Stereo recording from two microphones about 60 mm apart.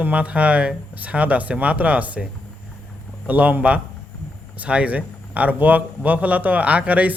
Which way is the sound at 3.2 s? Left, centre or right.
Right.